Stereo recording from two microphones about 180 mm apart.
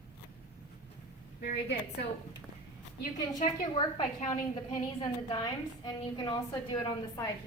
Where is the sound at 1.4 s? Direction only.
65° left (ahead or behind).